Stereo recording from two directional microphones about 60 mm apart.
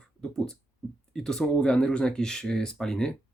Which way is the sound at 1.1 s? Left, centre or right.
Centre.